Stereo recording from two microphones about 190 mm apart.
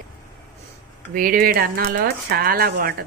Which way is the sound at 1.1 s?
50° right (ahead or behind).